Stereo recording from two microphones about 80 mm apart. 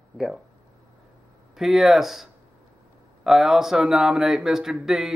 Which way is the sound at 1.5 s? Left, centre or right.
Centre.